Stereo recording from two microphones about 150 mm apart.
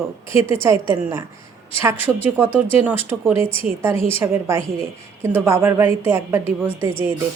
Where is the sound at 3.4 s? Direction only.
40° left (ahead or behind).